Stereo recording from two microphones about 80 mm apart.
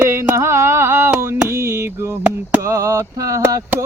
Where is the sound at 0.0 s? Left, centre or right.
Right.